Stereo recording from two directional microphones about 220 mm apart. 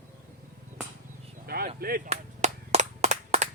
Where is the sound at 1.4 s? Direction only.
45° right (ahead or behind).